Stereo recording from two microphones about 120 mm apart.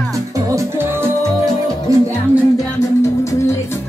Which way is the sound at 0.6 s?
20° right (ahead or behind).